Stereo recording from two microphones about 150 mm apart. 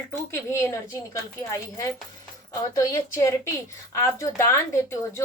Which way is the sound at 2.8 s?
20° left (ahead or behind).